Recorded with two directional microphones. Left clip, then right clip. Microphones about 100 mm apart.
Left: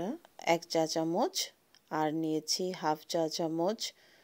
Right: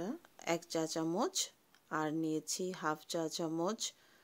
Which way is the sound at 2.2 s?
15° left (ahead or behind).